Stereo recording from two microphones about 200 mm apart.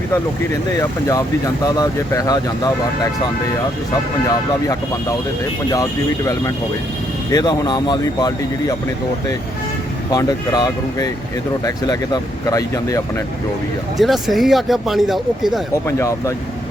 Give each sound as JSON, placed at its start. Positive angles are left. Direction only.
{"t": 0.8, "sound": "speech", "side_deg": 15}
{"t": 5.7, "sound": "speech", "side_deg": 15}
{"t": 10.1, "sound": "speech", "side_deg": 20}
{"t": 14.0, "sound": "speech", "side_deg": 0}
{"t": 15.7, "sound": "speech", "side_deg": 15}